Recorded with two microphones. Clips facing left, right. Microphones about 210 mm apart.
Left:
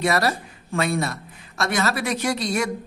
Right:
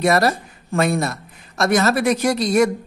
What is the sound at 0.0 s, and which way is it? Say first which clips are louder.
A woman's voice: right 5 dB; 45° right (ahead or behind).